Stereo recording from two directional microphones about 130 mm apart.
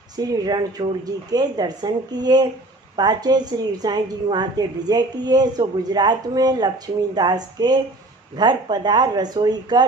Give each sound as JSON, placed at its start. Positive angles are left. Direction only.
{"t": 0.2, "sound": "a woman's voice", "side_deg": -30}